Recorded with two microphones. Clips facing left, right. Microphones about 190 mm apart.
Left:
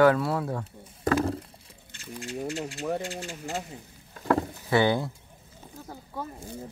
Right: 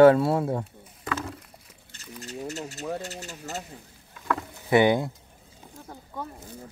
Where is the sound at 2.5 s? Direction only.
40° right (ahead or behind).